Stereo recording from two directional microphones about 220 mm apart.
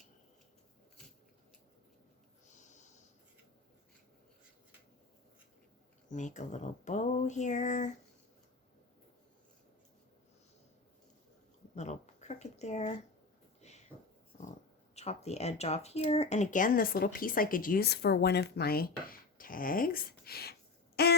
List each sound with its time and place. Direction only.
2.5 s snort: 35° left (ahead or behind)
6.1 s speech: 35° left (ahead or behind)
11.7 s speech: 30° left (ahead or behind)
13.6 s a sound: 30° left (ahead or behind)
14.9 s speech: 30° left (ahead or behind); by 21.2 s 45° left (ahead or behind)